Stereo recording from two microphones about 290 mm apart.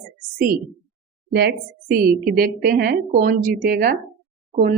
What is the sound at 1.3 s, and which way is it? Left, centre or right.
Speech, right.